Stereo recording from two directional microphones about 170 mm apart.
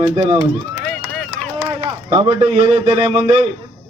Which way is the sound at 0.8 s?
5° left (ahead or behind).